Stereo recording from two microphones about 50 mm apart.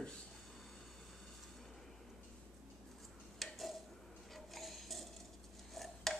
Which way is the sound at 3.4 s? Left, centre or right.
Centre.